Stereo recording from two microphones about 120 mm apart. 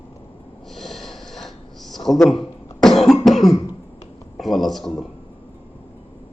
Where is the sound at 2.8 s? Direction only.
5° left (ahead or behind).